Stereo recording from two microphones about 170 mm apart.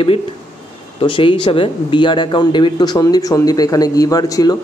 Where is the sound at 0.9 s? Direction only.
30° left (ahead or behind).